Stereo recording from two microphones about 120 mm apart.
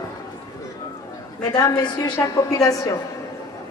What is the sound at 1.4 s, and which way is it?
A woman's voice, 30° left (ahead or behind).